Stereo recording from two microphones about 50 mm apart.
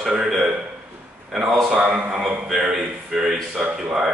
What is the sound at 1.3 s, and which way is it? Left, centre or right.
Speech, centre.